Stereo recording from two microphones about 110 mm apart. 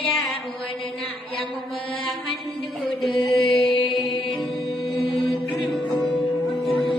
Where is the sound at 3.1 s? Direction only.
45° left (ahead or behind).